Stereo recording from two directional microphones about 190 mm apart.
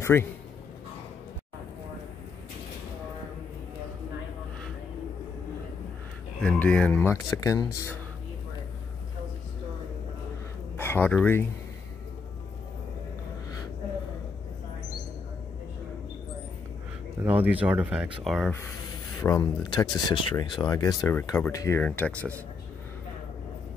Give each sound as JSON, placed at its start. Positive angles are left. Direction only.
{"t": 0.0, "sound": "a man's voice", "side_deg": 15}
{"t": 6.4, "sound": "speech", "side_deg": 5}
{"t": 10.8, "sound": "speech", "side_deg": 10}
{"t": 17.2, "sound": "speech", "side_deg": -10}
{"t": 19.1, "sound": "speech", "side_deg": 20}